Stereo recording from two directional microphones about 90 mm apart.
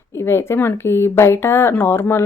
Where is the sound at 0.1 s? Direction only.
30° left (ahead or behind).